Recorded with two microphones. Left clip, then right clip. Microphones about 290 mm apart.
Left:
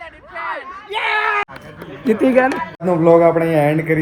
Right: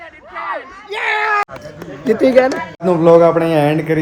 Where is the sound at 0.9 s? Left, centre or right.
Left.